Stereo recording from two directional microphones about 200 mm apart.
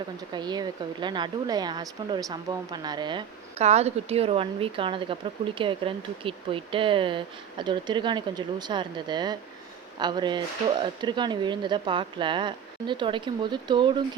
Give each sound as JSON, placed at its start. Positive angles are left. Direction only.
{"t": 0.3, "sound": "speech", "side_deg": -20}